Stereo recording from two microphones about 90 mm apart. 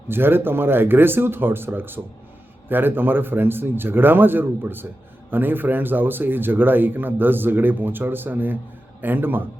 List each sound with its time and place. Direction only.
0.1 s a man's voice: 25° right (ahead or behind)